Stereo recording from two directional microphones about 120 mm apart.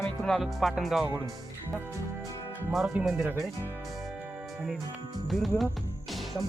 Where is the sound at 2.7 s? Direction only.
5° right (ahead or behind).